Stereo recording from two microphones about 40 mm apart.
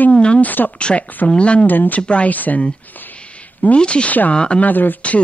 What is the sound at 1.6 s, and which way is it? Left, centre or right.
Speech, left.